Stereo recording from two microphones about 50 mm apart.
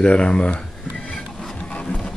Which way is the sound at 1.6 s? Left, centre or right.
Left.